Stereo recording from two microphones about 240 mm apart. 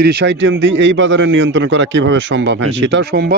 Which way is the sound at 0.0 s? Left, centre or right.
Right.